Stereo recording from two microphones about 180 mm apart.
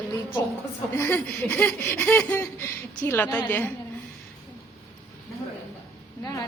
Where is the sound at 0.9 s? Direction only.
15° left (ahead or behind).